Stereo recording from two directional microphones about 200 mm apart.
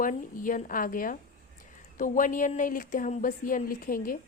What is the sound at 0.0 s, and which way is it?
A woman's voice, 40° left (ahead or behind).